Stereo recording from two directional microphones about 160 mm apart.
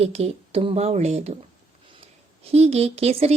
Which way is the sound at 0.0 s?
40° right (ahead or behind).